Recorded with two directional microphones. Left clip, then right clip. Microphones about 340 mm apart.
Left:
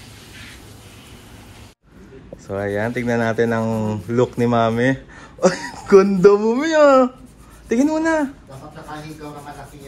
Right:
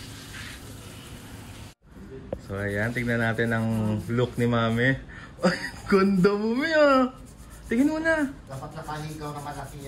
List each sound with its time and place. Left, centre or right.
2.4 s speech: left